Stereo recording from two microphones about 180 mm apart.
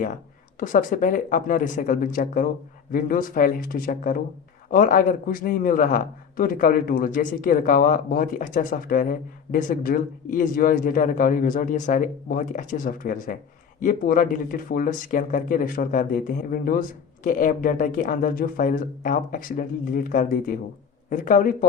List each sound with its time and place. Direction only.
0.6 s speech: 45° left (ahead or behind)